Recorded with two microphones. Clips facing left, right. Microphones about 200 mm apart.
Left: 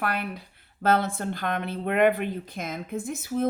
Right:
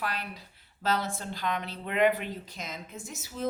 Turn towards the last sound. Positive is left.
turn(degrees=55)  # may be behind; listen again after turning